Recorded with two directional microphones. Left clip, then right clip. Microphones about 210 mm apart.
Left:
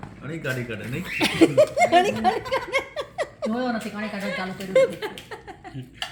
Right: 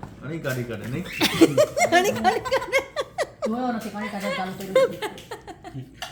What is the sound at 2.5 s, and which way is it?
Giggle, 5° right (ahead or behind).